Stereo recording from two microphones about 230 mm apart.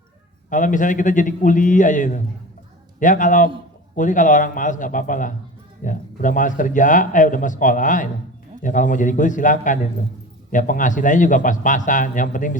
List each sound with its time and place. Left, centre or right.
0.5 s speech: left